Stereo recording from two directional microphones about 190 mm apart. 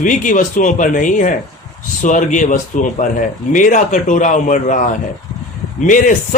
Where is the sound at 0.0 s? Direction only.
45° left (ahead or behind).